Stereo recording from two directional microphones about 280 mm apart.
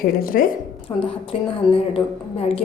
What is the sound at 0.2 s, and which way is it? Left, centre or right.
Speech, left.